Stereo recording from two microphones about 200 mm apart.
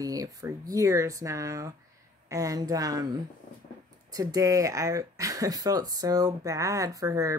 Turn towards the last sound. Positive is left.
turn(degrees=-15)  # may be behind; listen again after turning